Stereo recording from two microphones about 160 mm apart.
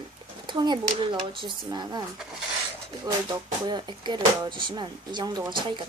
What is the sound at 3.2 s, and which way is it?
Speech, 25° right (ahead or behind).